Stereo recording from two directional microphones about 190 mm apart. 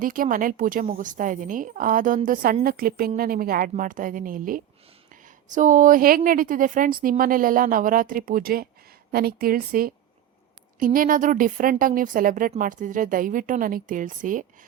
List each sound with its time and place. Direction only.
0.0 s a woman's voice: 45° right (ahead or behind)